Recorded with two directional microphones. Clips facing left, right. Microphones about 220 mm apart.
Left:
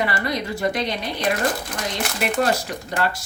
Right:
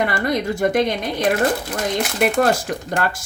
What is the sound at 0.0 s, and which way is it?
Speech, 50° right (ahead or behind).